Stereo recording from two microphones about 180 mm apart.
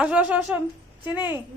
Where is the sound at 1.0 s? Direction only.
25° left (ahead or behind).